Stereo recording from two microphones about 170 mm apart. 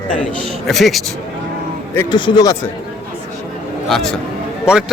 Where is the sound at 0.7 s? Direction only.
Centre (ahead or behind).